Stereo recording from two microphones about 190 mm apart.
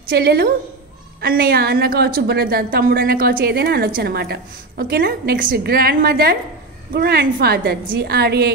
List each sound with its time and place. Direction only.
0.1 s a woman's voice: 55° right (ahead or behind)